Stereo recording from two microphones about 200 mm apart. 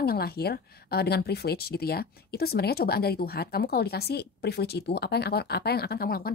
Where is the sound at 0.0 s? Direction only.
50° left (ahead or behind).